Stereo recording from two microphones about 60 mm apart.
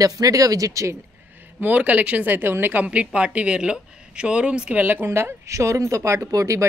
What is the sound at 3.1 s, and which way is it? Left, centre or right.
A woman's voice, centre.